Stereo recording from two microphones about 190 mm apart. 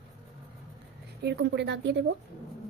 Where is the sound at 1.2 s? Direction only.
65° right (ahead or behind).